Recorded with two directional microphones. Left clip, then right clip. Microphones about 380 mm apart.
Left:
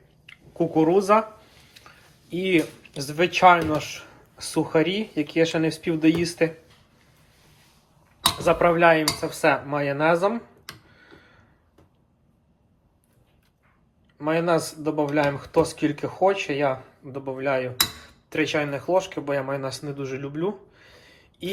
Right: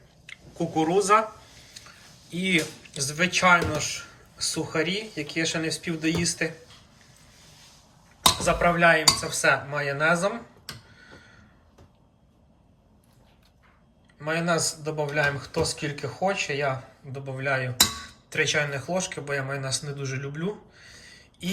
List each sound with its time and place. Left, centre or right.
0.3 s speech: centre
8.3 s speech: centre
14.2 s speech: centre